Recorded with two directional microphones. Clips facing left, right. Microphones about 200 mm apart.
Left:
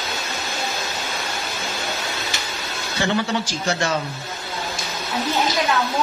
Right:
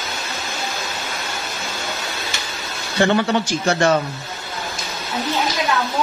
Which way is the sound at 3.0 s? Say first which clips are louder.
Right 5 dB; 60° right (ahead or behind).